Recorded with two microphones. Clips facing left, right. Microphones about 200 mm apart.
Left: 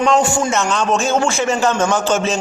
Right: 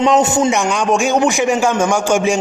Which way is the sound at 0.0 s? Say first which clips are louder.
Right 3 dB; 20° right (ahead or behind).